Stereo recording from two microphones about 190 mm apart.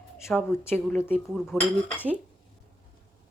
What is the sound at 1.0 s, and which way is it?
Speech, centre (ahead or behind).